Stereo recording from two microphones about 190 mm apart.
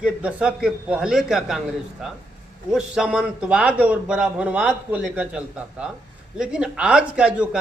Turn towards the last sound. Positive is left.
turn(degrees=-5)  # may be behind; listen again after turning